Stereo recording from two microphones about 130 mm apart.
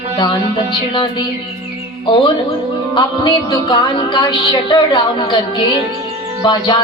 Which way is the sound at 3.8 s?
35° left (ahead or behind).